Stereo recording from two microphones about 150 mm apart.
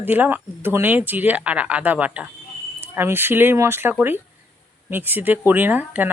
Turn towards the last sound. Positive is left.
turn(degrees=-10)  # may be behind; listen again after turning